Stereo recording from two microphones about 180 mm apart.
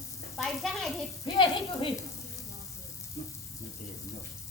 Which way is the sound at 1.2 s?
25° left (ahead or behind).